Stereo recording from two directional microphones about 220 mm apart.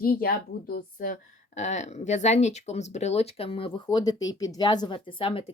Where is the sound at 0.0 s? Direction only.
40° left (ahead or behind).